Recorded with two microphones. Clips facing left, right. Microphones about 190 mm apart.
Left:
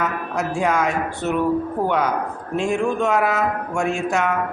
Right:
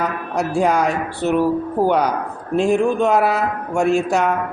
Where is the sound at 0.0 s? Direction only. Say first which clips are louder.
Right 2 dB; 35° right (ahead or behind).